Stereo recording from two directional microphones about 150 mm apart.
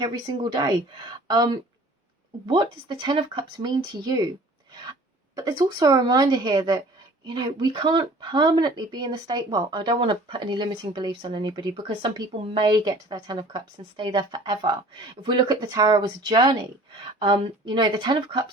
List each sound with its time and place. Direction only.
0.0 s speech: 30° right (ahead or behind)
2.8 s speech: 35° right (ahead or behind)
5.3 s speech: 25° right (ahead or behind)